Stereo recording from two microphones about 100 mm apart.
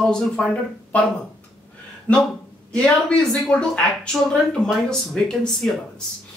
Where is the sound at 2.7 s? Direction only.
5° left (ahead or behind).